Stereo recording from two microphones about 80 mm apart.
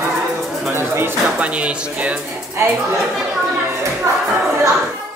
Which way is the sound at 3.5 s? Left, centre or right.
Right.